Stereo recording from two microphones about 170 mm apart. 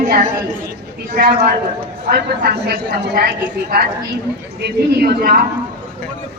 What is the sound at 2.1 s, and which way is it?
Speech, 75° right (ahead or behind).